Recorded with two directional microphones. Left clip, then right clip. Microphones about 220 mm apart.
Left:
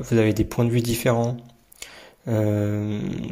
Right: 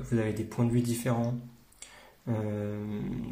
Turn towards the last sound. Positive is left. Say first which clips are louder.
# left 9 dB
turn(degrees=35)  # may be behind; listen again after turning